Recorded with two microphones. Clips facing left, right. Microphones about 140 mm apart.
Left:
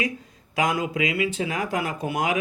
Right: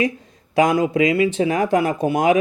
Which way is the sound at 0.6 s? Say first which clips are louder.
Right 8 dB; 30° right (ahead or behind).